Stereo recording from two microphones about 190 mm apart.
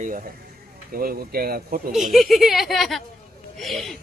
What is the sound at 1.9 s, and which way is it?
Speech, centre (ahead or behind).